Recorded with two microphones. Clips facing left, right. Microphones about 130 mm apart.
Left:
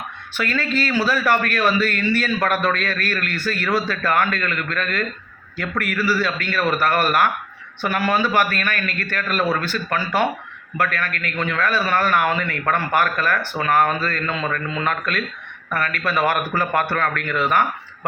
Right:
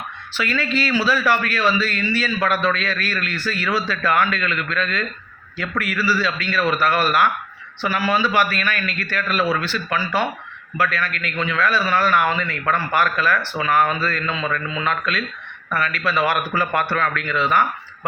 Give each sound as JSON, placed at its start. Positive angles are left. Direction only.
{"t": 0.3, "sound": "a man's voice", "side_deg": 45}